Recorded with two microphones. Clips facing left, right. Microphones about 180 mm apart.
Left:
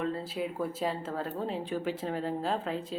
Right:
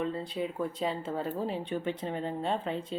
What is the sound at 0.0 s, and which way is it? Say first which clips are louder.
Speech: even; 5° left (ahead or behind).